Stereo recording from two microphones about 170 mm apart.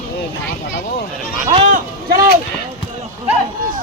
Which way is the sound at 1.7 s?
55° right (ahead or behind).